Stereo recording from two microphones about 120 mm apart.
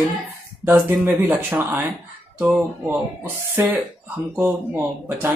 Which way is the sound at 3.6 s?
20° right (ahead or behind).